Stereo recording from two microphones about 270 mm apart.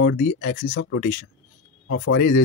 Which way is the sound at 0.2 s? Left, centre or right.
Left.